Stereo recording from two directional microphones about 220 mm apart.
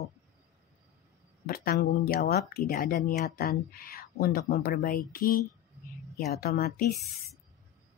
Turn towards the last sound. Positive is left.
turn(degrees=45)  # may be behind; listen again after turning